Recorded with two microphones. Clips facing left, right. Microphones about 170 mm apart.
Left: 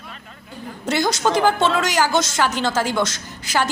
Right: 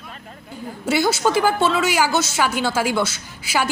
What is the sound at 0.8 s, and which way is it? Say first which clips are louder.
A woman's voice: right 1 dB; 5° right (ahead or behind).